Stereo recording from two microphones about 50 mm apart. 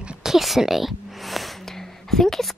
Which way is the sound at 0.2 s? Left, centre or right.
Centre.